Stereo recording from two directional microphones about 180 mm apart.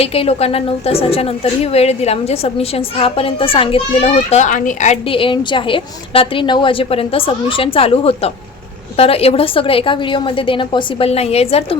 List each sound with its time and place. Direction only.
0.0 s a woman's voice: 35° left (ahead or behind)